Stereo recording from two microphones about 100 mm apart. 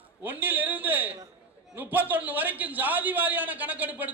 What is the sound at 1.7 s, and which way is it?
A man's voice, 20° right (ahead or behind).